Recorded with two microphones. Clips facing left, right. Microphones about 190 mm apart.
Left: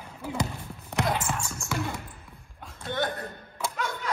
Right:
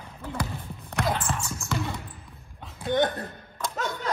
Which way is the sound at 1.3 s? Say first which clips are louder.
Right 1 dB; 5° left (ahead or behind).